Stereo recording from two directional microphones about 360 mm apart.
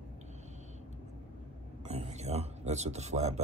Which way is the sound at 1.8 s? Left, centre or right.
Centre.